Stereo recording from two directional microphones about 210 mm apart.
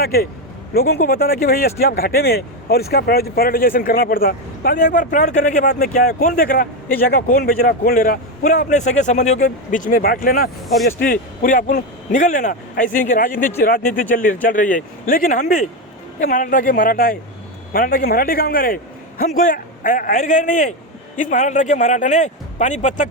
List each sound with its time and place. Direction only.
0.0 s a man's voice: 45° left (ahead or behind)